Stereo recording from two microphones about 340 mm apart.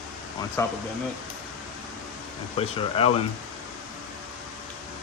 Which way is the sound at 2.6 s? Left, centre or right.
Centre.